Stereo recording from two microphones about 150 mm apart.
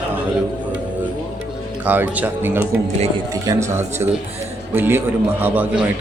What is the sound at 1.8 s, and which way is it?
Speech, 10° right (ahead or behind).